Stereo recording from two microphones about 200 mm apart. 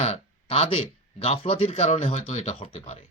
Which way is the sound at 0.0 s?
30° left (ahead or behind).